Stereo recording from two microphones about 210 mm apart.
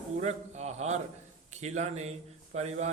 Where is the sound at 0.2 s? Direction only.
35° right (ahead or behind).